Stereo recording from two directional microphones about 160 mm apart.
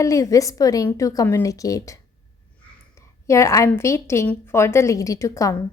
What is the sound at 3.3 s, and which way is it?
A woman's voice, 20° left (ahead or behind).